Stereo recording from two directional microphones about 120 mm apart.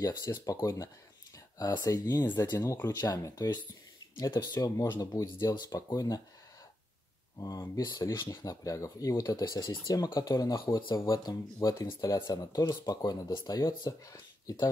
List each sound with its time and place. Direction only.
0.0 s speech: 30° left (ahead or behind)
2.5 s speech: 20° left (ahead or behind)
4.2 s speech: 35° left (ahead or behind)
7.3 s speech: 30° left (ahead or behind)